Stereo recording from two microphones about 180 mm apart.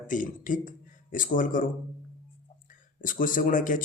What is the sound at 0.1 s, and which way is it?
A man's voice, 45° left (ahead or behind).